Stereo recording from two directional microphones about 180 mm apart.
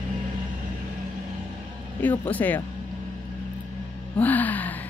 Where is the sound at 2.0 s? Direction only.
10° left (ahead or behind).